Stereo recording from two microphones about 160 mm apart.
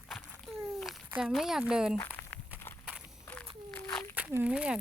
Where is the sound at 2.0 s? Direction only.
10° left (ahead or behind).